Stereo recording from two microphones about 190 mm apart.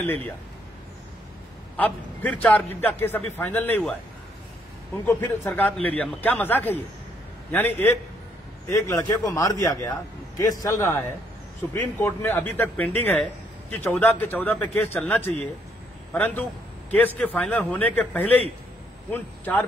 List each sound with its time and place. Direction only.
0.0 s a man's voice: 10° left (ahead or behind)
1.8 s a man's voice: 10° left (ahead or behind)
5.0 s a man's voice: 10° left (ahead or behind)